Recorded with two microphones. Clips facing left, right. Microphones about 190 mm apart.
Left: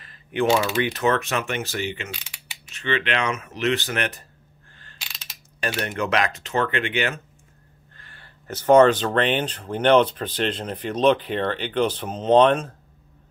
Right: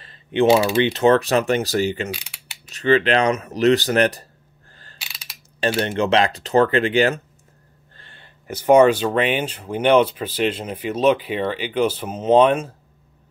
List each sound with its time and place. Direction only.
0.0 s typing: 25° right (ahead or behind)
0.8 s speech: 30° right (ahead or behind)
5.6 s speech: 30° right (ahead or behind)
8.0 s a sound: 25° right (ahead or behind)
8.5 s speech: 10° right (ahead or behind)